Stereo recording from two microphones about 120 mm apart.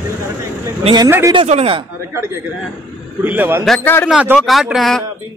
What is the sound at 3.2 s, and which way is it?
Speech, 15° right (ahead or behind).